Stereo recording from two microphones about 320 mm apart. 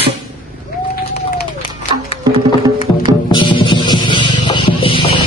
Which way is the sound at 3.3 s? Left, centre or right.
Centre.